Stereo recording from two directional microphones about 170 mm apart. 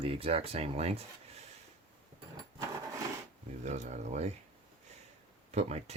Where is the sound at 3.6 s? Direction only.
45° right (ahead or behind).